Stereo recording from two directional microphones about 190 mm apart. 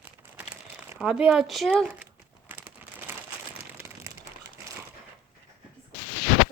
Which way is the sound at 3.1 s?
10° right (ahead or behind).